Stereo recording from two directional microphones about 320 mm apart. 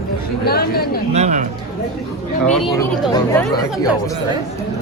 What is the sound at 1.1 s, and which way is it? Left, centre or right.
Speech, right.